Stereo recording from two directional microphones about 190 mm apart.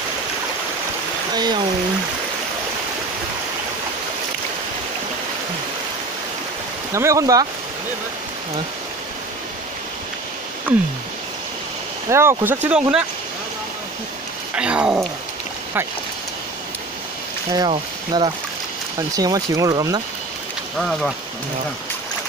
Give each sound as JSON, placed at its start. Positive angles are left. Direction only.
{"t": 1.3, "sound": "speech", "side_deg": -20}
{"t": 6.9, "sound": "speech", "side_deg": -15}
{"t": 12.1, "sound": "speech", "side_deg": -15}
{"t": 14.5, "sound": "speech", "side_deg": -5}
{"t": 17.5, "sound": "speech", "side_deg": -20}
{"t": 20.7, "sound": "speech", "side_deg": 0}